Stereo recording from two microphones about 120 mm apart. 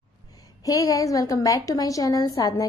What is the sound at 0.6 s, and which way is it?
A woman's voice, 30° left (ahead or behind).